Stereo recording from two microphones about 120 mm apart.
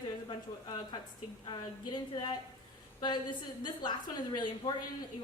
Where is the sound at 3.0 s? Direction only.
40° left (ahead or behind).